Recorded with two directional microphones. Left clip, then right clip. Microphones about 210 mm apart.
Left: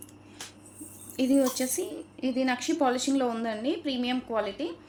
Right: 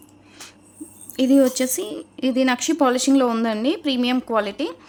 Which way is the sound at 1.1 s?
35° right (ahead or behind).